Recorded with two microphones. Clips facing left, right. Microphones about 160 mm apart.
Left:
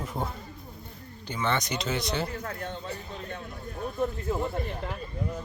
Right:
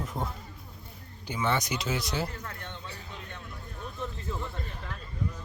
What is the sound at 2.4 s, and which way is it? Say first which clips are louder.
A man's voice: left 6 dB; 35° left (ahead or behind).